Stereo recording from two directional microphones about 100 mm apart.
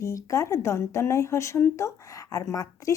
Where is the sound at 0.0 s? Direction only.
30° left (ahead or behind).